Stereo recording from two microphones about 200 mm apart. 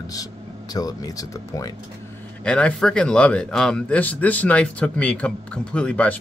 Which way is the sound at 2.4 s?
5° left (ahead or behind).